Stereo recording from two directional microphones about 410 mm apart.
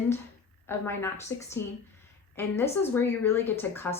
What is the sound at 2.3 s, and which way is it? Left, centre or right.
Speech, centre.